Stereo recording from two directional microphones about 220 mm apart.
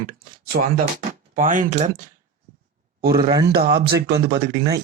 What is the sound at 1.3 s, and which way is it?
Speech, 40° right (ahead or behind).